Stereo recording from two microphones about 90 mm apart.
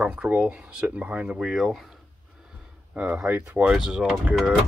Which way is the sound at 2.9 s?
15° right (ahead or behind).